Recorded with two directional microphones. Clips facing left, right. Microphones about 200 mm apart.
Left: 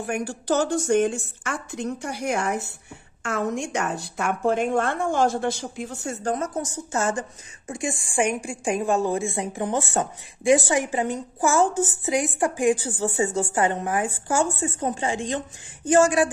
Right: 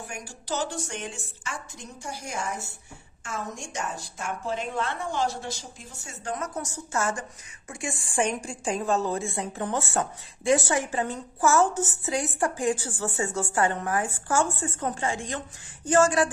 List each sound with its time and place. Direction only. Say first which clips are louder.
0.0 s a woman's voice: left 12 dB; 60° left (ahead or behind)
6.2 s a woman's voice: left 5 dB; 30° left (ahead or behind); by 16.3 s 15° left (ahead or behind)